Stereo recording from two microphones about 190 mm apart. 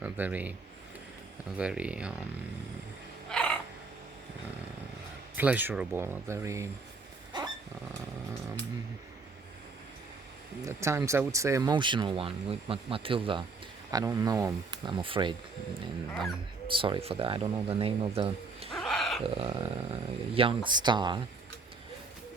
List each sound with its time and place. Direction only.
0.0 s speech: 10° right (ahead or behind)
3.2 s a sound: 5° left (ahead or behind)
5.4 s speech: 10° right (ahead or behind)
10.7 s speech: 15° right (ahead or behind)
16.6 s speech: 25° right (ahead or behind)
18.7 s a sound: centre (ahead or behind)
19.3 s speech: 30° right (ahead or behind)